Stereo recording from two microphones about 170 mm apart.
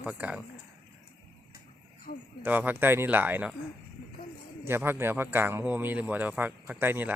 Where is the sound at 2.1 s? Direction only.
60° left (ahead or behind).